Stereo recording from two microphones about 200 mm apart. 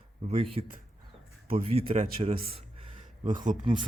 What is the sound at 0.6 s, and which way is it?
Speech, 25° right (ahead or behind).